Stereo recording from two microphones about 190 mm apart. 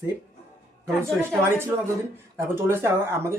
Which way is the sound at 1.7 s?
20° right (ahead or behind).